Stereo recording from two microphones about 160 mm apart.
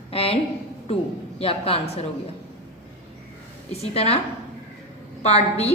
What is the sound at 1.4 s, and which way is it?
Speech, 35° left (ahead or behind).